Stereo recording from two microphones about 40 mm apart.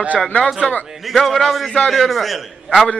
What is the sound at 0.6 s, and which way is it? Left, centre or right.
Speech, left.